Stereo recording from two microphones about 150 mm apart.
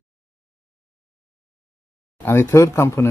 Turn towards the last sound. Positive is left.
turn(degrees=20)  # may be behind; listen again after turning